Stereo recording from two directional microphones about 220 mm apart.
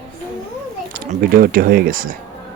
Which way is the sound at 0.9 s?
40° right (ahead or behind).